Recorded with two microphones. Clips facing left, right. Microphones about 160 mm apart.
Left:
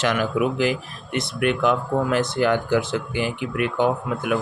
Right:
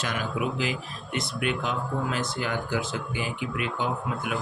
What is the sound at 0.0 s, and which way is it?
Speech, 90° left.